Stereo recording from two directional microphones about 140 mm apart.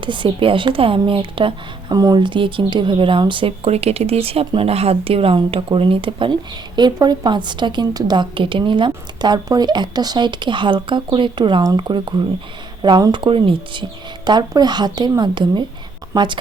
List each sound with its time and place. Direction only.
0.0 s a woman's voice: 35° right (ahead or behind)